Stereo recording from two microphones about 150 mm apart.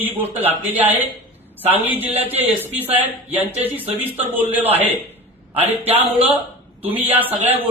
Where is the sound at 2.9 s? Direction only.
45° right (ahead or behind).